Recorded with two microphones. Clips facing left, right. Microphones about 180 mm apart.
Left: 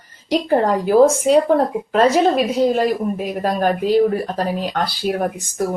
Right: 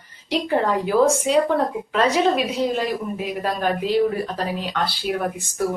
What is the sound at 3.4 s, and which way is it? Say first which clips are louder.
Speech: left 5 dB; 45° left (ahead or behind).